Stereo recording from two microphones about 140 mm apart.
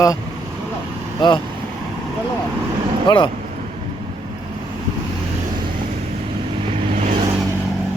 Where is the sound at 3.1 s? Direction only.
35° left (ahead or behind).